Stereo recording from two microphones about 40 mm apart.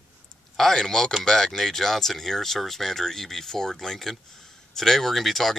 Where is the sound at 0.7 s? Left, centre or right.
Centre.